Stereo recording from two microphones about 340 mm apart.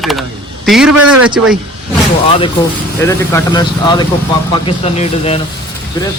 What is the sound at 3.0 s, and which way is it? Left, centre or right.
Speech, centre.